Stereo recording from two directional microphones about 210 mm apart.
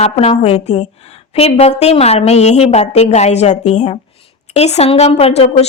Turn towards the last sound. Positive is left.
turn(degrees=30)  # may be behind; listen again after turning